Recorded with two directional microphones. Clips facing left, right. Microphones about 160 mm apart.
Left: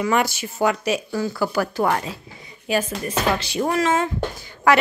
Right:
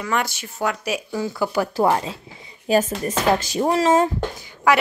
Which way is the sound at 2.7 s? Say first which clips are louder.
Right 3 dB; 35° right (ahead or behind).